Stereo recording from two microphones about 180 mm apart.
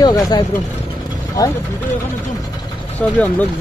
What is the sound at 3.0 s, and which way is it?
Speech, 10° left (ahead or behind).